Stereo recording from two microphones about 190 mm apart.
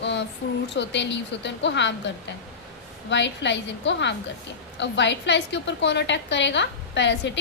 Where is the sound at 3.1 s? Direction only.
70° left (ahead or behind).